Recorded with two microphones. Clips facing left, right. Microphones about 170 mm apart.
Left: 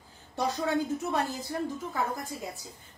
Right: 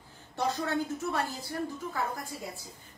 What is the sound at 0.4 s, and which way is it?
A woman's voice, 15° left (ahead or behind).